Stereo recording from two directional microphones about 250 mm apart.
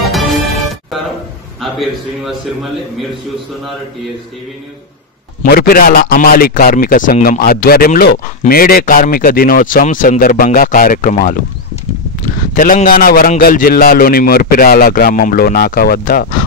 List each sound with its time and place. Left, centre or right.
0.0 s music: centre
1.6 s a man's voice: centre
5.4 s a man's voice: left